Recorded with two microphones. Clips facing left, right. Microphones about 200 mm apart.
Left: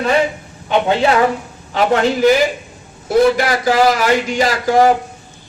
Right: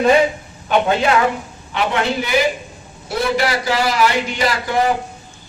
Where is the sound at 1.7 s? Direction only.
40° left (ahead or behind).